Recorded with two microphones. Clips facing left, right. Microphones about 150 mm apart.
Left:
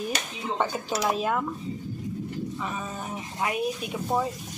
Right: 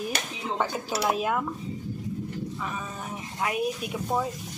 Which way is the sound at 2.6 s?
5° left (ahead or behind).